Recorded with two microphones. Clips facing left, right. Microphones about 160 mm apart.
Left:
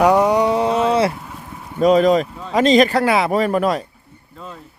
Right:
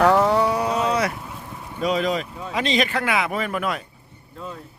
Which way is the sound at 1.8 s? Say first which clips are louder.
Left 9 dB; 45° left (ahead or behind).